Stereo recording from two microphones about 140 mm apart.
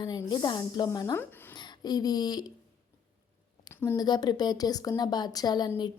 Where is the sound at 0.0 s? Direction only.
30° left (ahead or behind).